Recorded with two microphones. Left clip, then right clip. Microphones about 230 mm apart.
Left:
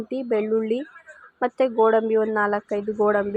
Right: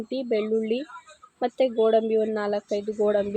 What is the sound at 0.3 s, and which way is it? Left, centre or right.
Speech, centre.